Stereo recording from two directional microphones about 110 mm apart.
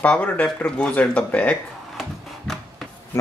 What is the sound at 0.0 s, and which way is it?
Speech, 15° left (ahead or behind).